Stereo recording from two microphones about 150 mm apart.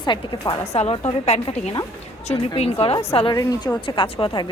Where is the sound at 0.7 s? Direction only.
45° left (ahead or behind).